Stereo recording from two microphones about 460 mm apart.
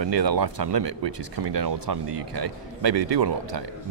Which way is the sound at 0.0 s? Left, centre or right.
Right.